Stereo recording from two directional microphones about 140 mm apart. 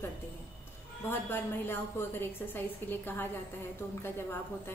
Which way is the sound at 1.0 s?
15° left (ahead or behind).